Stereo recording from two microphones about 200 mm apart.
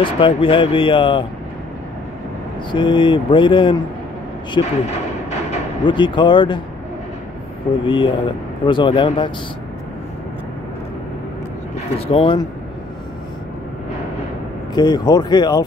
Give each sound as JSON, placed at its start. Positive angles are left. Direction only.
{"t": 0.0, "sound": "speech", "side_deg": 25}
{"t": 2.7, "sound": "speech", "side_deg": 25}
{"t": 7.8, "sound": "speech", "side_deg": 25}
{"t": 12.1, "sound": "speech", "side_deg": 25}
{"t": 14.7, "sound": "speech", "side_deg": 20}